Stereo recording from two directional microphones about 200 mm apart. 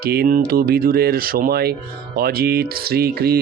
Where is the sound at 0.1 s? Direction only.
45° right (ahead or behind).